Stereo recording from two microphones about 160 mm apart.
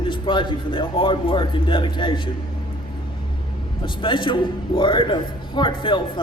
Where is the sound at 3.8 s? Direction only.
30° left (ahead or behind).